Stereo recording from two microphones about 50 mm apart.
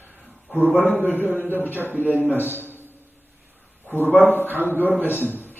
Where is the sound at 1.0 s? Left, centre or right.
Left.